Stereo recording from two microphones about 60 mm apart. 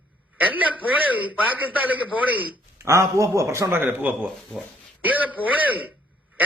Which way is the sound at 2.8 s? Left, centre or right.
Right.